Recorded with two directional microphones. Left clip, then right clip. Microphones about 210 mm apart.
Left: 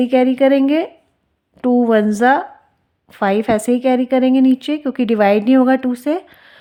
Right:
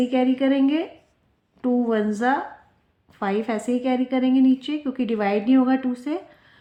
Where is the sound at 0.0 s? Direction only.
45° left (ahead or behind).